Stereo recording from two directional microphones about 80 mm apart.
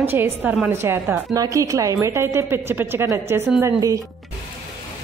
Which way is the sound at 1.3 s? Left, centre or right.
Right.